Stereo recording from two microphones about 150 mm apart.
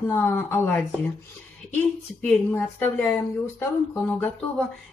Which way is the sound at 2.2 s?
10° left (ahead or behind).